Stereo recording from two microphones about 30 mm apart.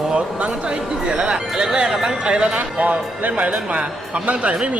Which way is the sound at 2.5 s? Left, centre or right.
Right.